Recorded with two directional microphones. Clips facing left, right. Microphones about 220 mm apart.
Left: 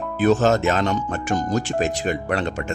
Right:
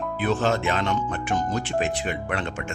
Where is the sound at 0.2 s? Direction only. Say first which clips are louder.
Left 7 dB; 45° left (ahead or behind).